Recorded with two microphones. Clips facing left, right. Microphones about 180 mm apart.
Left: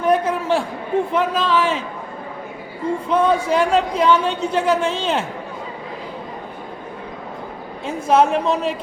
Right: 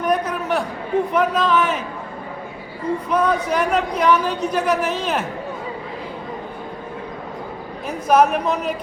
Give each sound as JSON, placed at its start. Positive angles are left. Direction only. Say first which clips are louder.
{"t": 0.0, "sound": "a sound", "louder": "left 3 dB", "side_deg": 25}
{"t": 1.1, "sound": "a woman's voice", "louder": "right 2 dB", "side_deg": 25}
{"t": 3.1, "sound": "a woman's voice", "louder": "left 3 dB", "side_deg": 25}
{"t": 7.9, "sound": "a woman's voice", "louder": "even", "side_deg": 25}